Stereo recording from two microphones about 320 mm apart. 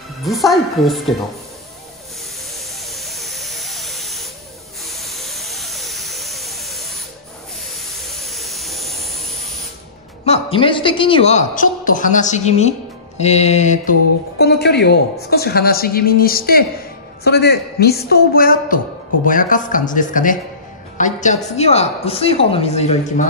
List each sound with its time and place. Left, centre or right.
0.2 s a woman's voice: centre
2.8 s hiss: centre
4.8 s a sound: centre
10.2 s a woman's voice: centre